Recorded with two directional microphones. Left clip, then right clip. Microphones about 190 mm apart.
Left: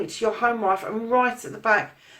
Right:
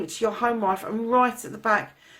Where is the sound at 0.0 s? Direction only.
45° right (ahead or behind).